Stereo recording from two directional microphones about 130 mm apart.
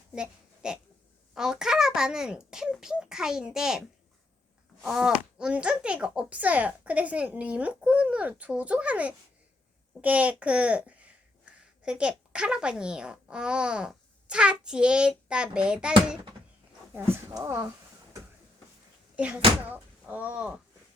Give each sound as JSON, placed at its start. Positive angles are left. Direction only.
{"t": 0.1, "sound": "a child's voice", "side_deg": -5}
{"t": 19.1, "sound": "speech", "side_deg": -10}